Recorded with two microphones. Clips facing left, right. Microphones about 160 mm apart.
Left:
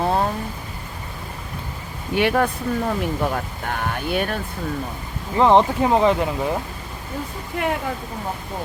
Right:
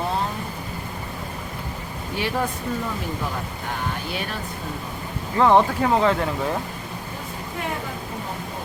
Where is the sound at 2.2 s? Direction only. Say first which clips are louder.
Left 6 dB; 65° left (ahead or behind).